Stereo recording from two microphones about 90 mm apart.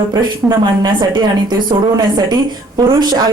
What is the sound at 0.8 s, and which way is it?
A woman's voice, 55° right (ahead or behind).